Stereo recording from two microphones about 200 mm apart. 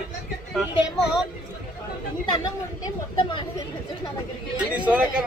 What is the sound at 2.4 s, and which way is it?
Speech, 20° left (ahead or behind).